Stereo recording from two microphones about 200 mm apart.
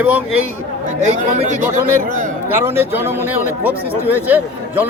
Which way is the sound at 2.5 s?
10° right (ahead or behind).